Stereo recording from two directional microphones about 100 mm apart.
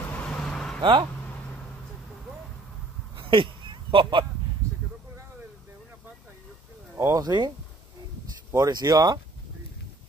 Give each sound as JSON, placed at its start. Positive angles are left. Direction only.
{"t": 0.1, "sound": "vehicle", "side_deg": 10}
{"t": 0.7, "sound": "speech", "side_deg": -55}
{"t": 3.2, "sound": "a sound", "side_deg": -55}
{"t": 7.2, "sound": "speech", "side_deg": -45}
{"t": 8.5, "sound": "speech", "side_deg": -40}